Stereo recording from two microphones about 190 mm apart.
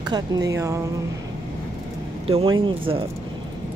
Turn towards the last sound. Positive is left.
turn(degrees=-30)  # may be behind; listen again after turning